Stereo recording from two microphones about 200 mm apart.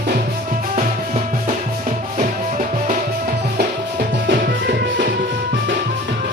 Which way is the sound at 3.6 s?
45° right (ahead or behind).